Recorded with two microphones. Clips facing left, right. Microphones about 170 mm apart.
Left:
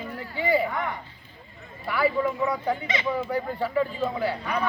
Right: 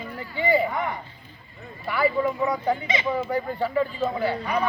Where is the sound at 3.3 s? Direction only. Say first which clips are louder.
Right 1 dB; 5° left (ahead or behind).